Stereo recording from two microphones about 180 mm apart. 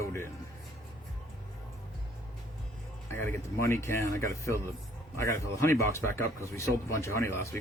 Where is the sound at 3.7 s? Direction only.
15° left (ahead or behind).